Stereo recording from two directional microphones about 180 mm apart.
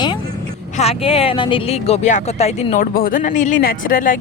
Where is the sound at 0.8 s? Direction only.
35° left (ahead or behind).